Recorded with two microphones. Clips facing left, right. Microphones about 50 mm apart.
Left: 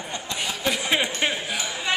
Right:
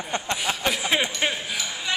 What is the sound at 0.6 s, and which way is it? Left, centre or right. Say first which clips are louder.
Speech: left 1 dB; centre.